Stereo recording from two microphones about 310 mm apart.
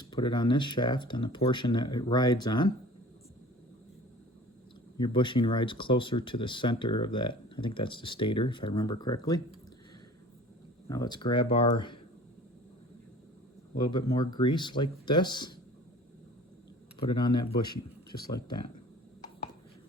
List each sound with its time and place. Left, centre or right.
0.0 s speech: centre
4.9 s speech: centre
10.8 s speech: centre
13.7 s speech: centre
17.0 s speech: centre